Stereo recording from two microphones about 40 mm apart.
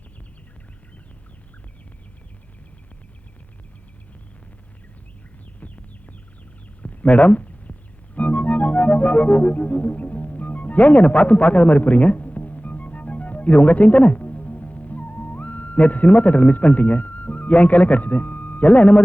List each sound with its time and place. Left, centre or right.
5.5 s chicken: left
6.8 s music: left